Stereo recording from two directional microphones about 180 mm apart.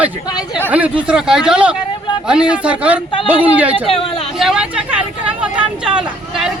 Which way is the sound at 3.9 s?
30° left (ahead or behind).